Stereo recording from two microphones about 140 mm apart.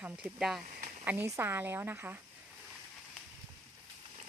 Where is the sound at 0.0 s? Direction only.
5° right (ahead or behind).